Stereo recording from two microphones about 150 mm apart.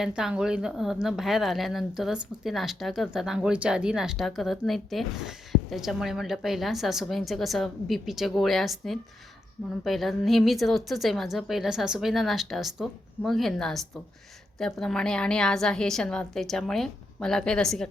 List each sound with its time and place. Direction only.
0.0 s a woman's voice: 5° right (ahead or behind)